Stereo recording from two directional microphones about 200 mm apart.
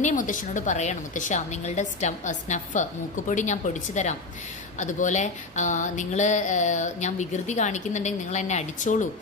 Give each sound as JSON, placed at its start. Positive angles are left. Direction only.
{"t": 0.0, "sound": "a woman's voice", "side_deg": 40}